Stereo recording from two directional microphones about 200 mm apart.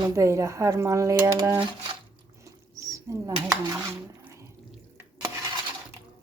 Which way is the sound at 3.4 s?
15° right (ahead or behind).